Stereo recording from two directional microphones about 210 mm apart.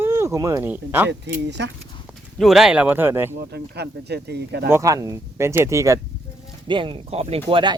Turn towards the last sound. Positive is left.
turn(degrees=-25)  # may be behind; listen again after turning